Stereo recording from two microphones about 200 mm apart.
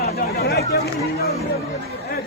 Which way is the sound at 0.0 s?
50° left (ahead or behind).